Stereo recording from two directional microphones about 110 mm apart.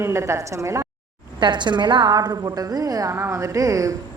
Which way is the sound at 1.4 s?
45° right (ahead or behind).